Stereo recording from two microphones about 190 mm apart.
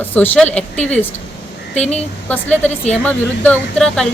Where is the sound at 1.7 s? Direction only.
35° left (ahead or behind).